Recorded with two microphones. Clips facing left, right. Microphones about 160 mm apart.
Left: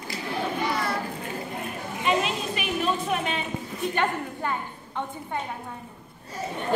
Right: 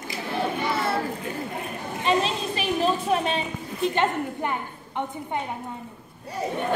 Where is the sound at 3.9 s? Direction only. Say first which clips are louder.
Even; 20° right (ahead or behind).